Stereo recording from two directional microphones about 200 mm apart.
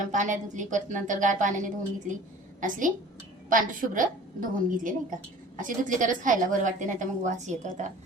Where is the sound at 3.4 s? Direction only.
40° right (ahead or behind).